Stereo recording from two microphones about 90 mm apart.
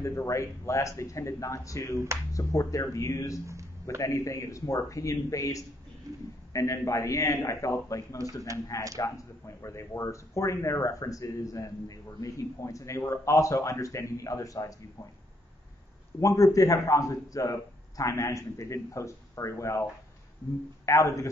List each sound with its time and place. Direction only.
0.0 s a man's voice: 35° left (ahead or behind)
6.1 s a man's voice: 40° right (ahead or behind)
6.5 s a man's voice: 35° left (ahead or behind)
16.2 s a man's voice: 40° left (ahead or behind)
20.8 s a man's voice: 35° left (ahead or behind)